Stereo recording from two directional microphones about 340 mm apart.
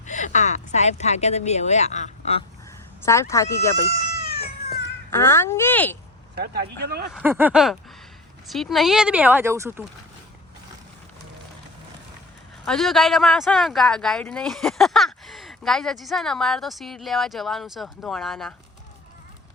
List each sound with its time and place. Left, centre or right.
0.0 s speech: left
3.1 s speech: centre
5.1 s speech: centre
6.3 s speech: right
7.1 s speech: centre
12.6 s speech: centre